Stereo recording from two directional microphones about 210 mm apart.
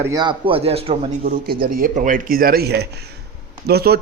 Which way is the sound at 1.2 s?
45° right (ahead or behind).